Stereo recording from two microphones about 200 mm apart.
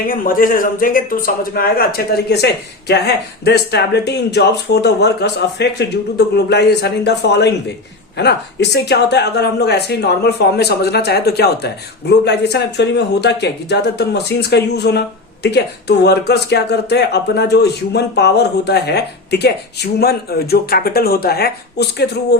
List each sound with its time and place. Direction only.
0.1 s a man's voice: 45° left (ahead or behind)